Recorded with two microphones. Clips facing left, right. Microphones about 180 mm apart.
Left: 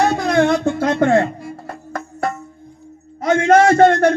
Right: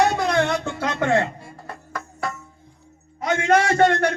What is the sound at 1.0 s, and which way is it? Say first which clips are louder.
Speech: left 5 dB; 40° left (ahead or behind).